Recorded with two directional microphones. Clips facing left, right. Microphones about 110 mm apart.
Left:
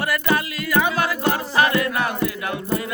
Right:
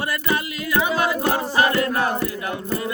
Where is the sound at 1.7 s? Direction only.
35° right (ahead or behind).